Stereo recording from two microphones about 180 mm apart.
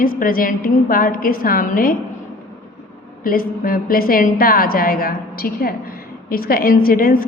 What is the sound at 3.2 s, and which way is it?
A woman's voice, 50° left (ahead or behind).